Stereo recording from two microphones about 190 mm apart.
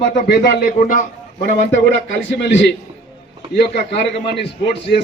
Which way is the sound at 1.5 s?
70° left (ahead or behind).